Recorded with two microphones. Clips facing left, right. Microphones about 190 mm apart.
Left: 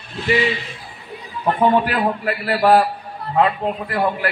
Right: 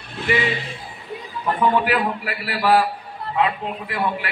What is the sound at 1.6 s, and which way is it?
A man's voice, 40° left (ahead or behind).